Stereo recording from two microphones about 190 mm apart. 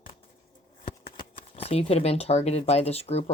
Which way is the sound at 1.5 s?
30° left (ahead or behind).